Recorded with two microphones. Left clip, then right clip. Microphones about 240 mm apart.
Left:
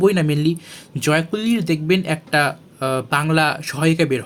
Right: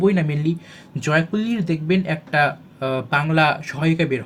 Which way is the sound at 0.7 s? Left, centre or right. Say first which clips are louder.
Left 3 dB; left.